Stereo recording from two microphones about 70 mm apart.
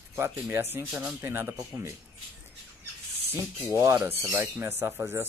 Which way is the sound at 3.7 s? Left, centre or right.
Right.